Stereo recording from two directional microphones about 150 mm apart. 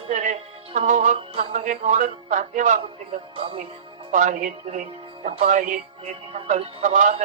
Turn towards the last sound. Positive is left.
turn(degrees=-55)  # may be behind; listen again after turning